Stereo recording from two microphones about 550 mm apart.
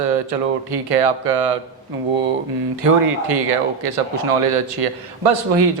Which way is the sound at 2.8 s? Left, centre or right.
Right.